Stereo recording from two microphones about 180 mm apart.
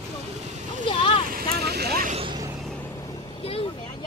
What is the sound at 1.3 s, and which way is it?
Boat, 60° right (ahead or behind).